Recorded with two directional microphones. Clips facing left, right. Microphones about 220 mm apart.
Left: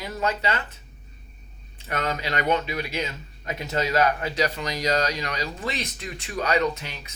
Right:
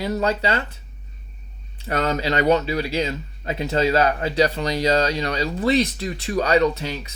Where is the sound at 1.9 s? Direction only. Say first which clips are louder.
Right 6 dB; 30° right (ahead or behind).